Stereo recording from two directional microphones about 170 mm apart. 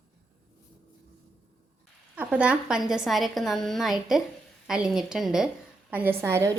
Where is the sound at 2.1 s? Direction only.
5° right (ahead or behind).